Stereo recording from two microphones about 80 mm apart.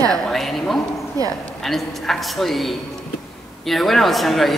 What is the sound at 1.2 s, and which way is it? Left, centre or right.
Speech, right.